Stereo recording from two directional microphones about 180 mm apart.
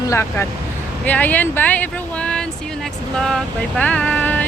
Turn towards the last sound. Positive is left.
turn(degrees=10)  # may be behind; listen again after turning